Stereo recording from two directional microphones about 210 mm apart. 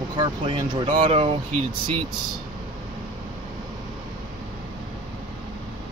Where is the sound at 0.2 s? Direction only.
20° right (ahead or behind).